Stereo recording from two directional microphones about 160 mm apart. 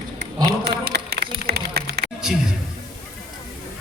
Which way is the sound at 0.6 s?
90° right.